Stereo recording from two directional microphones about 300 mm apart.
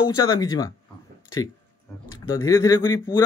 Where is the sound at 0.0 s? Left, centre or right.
Centre.